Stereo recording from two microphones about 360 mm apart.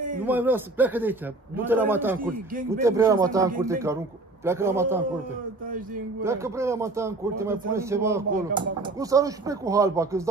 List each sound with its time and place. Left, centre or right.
0.2 s a man's voice: centre
2.1 s speech: right
2.8 s speech: centre
6.2 s speech: centre